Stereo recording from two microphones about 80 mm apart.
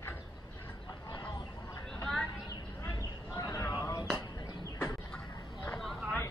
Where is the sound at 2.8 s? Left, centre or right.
Left.